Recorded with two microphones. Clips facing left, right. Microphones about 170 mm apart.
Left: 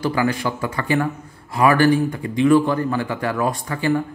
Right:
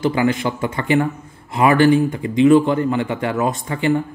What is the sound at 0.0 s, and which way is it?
Speech, 20° right (ahead or behind).